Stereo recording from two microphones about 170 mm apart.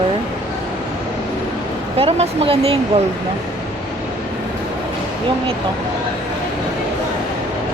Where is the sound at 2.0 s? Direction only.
35° right (ahead or behind).